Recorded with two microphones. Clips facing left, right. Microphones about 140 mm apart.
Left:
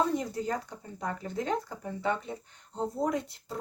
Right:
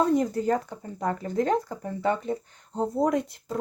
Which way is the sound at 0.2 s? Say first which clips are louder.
Right 8 dB; 55° right (ahead or behind).